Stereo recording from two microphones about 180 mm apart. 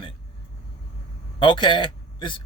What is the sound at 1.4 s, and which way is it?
Speech, 25° left (ahead or behind).